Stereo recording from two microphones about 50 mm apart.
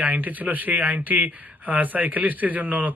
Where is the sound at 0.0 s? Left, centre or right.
Right.